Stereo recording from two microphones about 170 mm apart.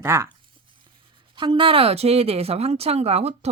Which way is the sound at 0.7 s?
30° right (ahead or behind).